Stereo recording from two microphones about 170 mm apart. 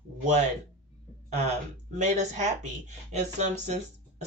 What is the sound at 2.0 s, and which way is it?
Speech, 45° right (ahead or behind).